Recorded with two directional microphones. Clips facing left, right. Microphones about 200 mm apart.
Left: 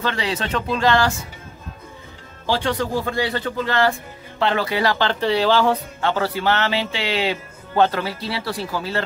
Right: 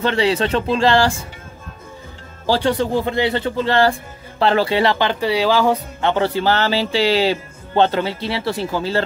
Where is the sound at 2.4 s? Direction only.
35° right (ahead or behind).